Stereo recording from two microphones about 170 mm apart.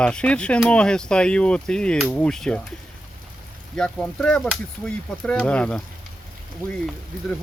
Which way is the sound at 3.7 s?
5° left (ahead or behind).